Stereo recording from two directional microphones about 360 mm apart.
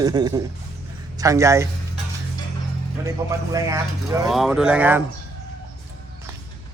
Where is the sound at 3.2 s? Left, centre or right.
Centre.